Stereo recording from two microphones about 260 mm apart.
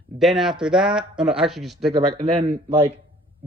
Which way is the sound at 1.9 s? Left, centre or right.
Right.